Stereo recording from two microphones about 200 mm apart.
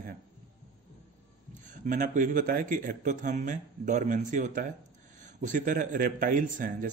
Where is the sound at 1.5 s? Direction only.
40° right (ahead or behind).